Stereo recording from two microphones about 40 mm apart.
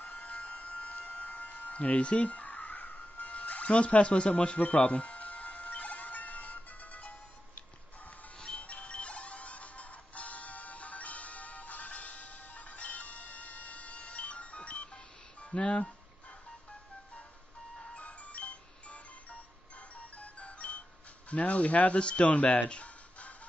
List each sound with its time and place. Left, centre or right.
0.0 s a sound: left
1.0 s music: left
4.6 s music: left
8.4 s music: left
17.9 s music: left
20.2 s music: left
21.3 s speech: left